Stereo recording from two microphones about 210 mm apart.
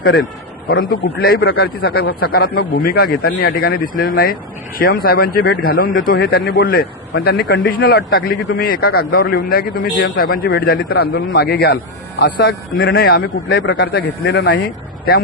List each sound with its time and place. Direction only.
0.0 s a man's voice: 45° left (ahead or behind)
12.9 s a man's voice: 45° left (ahead or behind)